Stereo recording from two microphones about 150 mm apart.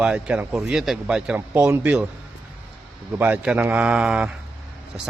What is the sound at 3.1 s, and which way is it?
A man's voice, 10° right (ahead or behind).